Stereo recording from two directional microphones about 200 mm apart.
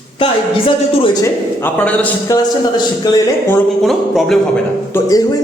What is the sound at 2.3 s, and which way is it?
Speech, 20° left (ahead or behind).